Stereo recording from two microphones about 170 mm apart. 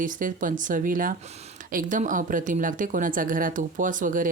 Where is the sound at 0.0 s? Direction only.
50° right (ahead or behind).